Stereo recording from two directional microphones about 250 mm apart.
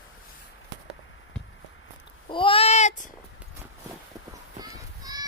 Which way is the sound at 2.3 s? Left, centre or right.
Left.